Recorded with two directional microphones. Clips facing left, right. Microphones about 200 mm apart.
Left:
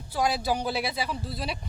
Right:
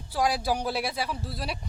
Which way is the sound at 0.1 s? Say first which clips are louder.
Even; 5° right (ahead or behind).